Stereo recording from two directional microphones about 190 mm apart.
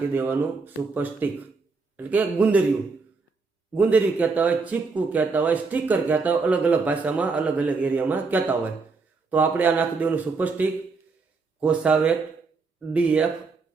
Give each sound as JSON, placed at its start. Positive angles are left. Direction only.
{"t": 0.1, "sound": "speech", "side_deg": -10}
{"t": 3.8, "sound": "speech", "side_deg": -10}